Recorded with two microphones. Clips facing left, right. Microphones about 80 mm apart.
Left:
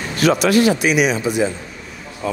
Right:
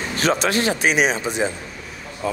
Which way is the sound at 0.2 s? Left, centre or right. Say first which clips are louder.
Left 6 dB; right.